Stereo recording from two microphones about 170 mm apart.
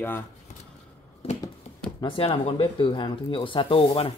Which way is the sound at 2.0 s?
30° left (ahead or behind).